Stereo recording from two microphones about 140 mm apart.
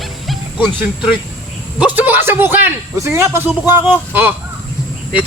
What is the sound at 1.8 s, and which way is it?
Speech, 15° right (ahead or behind).